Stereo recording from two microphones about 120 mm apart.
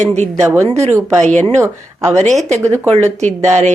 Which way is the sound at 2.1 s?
75° right (ahead or behind).